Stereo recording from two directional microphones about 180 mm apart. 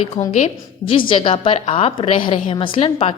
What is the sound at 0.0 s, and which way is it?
A woman's voice, 40° left (ahead or behind).